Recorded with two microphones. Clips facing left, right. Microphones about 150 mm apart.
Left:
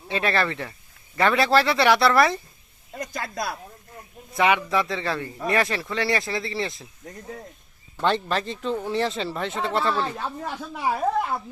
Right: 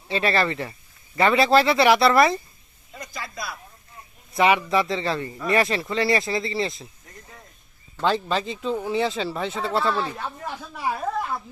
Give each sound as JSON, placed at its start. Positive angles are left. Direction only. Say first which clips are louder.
{"t": 0.1, "sound": "speech", "louder": "right 2 dB", "side_deg": 0}
{"t": 2.9, "sound": "speech", "louder": "left 4 dB", "side_deg": 50}
{"t": 4.4, "sound": "speech", "louder": "right 2 dB", "side_deg": 0}
{"t": 8.0, "sound": "speech", "louder": "right 1 dB", "side_deg": 0}
{"t": 10.2, "sound": "speech", "louder": "left 2 dB", "side_deg": 15}